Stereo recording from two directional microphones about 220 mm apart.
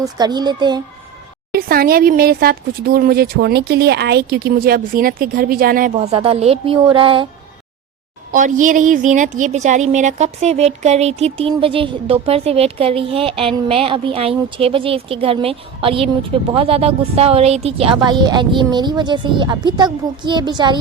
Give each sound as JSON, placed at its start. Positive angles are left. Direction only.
{"t": 0.0, "sound": "speech", "side_deg": -20}
{"t": 1.5, "sound": "speech", "side_deg": -40}
{"t": 6.0, "sound": "speech", "side_deg": -25}
{"t": 8.3, "sound": "speech", "side_deg": -35}